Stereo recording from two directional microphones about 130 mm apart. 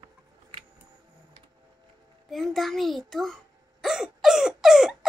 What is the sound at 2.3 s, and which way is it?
A child's voice, centre (ahead or behind).